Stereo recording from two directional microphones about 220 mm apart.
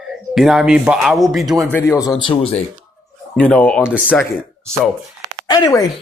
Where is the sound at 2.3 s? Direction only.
25° left (ahead or behind).